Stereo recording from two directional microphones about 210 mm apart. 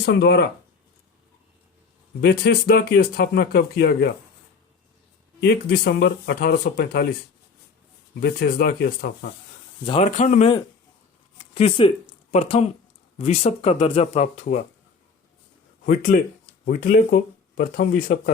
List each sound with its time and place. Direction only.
0.0 s speech: 50° left (ahead or behind)
2.2 s speech: 50° left (ahead or behind)
5.4 s speech: 50° left (ahead or behind)
8.2 s speech: 45° left (ahead or behind)
9.8 s speech: 30° left (ahead or behind)
11.3 s a sound: 25° left (ahead or behind)
12.3 s speech: 30° left (ahead or behind)
16.1 s speech: 40° left (ahead or behind)